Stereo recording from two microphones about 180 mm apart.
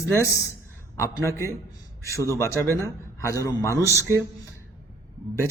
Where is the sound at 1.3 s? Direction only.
15° right (ahead or behind).